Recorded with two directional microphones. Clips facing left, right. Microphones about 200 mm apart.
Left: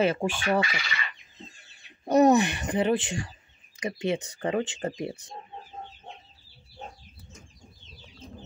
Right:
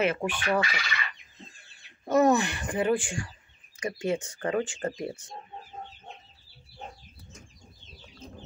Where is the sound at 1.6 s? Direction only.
20° left (ahead or behind).